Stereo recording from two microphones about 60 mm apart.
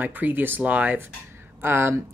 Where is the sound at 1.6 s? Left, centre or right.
Right.